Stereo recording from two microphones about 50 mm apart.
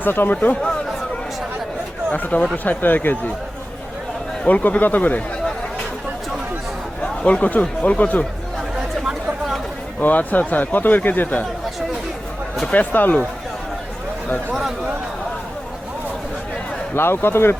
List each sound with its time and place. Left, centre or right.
0.0 s speech: left
0.6 s chatter: centre
2.1 s a man's voice: left
4.4 s a man's voice: left
7.3 s speech: left
10.0 s a man's voice: left
12.7 s a man's voice: left
16.9 s speech: left